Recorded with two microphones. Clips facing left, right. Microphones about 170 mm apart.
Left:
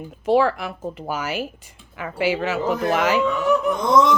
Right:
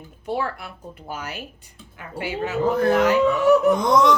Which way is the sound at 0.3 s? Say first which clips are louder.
Left 9 dB; 90° left.